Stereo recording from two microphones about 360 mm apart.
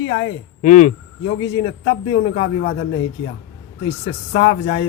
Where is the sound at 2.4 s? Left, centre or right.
Centre.